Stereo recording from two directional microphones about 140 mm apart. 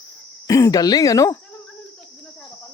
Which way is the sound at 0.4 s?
25° left (ahead or behind).